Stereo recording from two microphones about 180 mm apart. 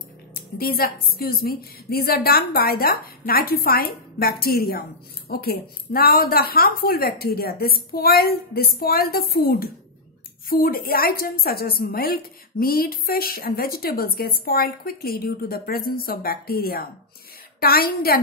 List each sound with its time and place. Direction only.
0.3 s a woman's voice: 55° left (ahead or behind)